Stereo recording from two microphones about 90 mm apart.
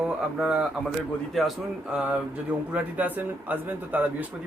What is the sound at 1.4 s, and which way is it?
Speech, centre (ahead or behind).